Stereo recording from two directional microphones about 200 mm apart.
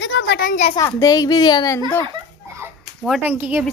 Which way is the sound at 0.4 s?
40° left (ahead or behind).